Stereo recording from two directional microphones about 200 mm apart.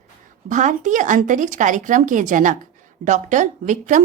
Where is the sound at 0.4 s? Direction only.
40° right (ahead or behind).